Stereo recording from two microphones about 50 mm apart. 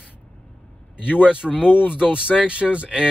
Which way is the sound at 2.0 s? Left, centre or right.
Right.